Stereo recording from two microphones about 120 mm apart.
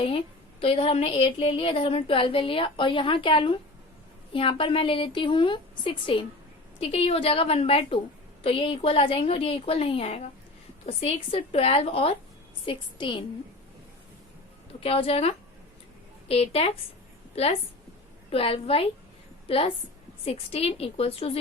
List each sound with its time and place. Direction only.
0.6 s a woman's voice: 50° left (ahead or behind)
12.6 s a woman's voice: 40° left (ahead or behind)
14.8 s a woman's voice: 50° left (ahead or behind)